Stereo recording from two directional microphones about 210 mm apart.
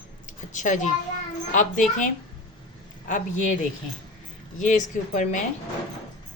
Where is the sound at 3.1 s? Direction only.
35° left (ahead or behind).